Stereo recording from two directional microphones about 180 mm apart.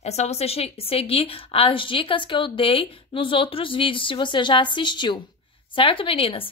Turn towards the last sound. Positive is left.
turn(degrees=30)  # may be behind; listen again after turning